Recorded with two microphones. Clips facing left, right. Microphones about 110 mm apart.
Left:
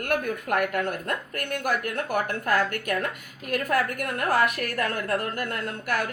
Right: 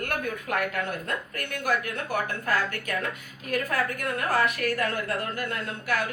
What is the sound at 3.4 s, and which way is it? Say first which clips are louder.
A woman's voice: left 2 dB; 55° left (ahead or behind).